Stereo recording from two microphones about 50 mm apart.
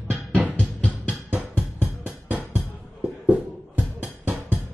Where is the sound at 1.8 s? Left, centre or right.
Right.